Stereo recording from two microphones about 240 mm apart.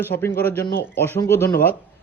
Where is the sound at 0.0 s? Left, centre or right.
Centre.